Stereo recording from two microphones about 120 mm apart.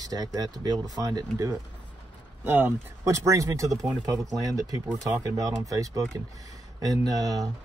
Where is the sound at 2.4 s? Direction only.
20° right (ahead or behind).